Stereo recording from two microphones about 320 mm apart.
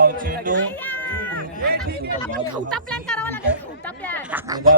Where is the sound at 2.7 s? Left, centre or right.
Centre.